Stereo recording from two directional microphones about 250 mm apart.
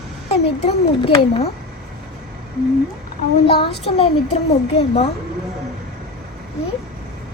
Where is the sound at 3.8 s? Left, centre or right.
Left.